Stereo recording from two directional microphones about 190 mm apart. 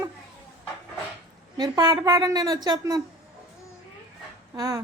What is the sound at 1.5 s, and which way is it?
A woman's voice, 20° right (ahead or behind).